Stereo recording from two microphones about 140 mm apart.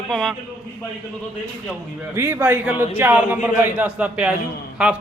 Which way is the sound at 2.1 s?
15° right (ahead or behind).